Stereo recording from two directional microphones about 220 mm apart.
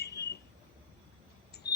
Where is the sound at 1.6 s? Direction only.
45° left (ahead or behind).